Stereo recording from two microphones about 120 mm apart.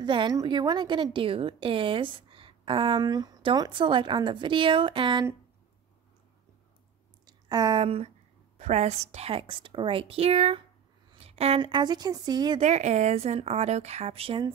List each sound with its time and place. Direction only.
0.0 s a woman's voice: 40° right (ahead or behind)
7.2 s a sound: 35° right (ahead or behind)
7.8 s a woman's voice: 60° right (ahead or behind)
11.1 s a sound: 55° right (ahead or behind)
11.6 s a woman's voice: 40° right (ahead or behind)
12.5 s a woman's voice: 70° right (ahead or behind); by 14.4 s 55° right (ahead or behind)